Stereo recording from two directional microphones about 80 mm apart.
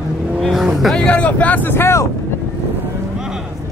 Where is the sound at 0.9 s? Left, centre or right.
Centre.